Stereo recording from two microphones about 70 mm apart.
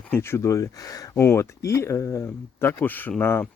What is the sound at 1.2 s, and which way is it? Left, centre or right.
Speech, left.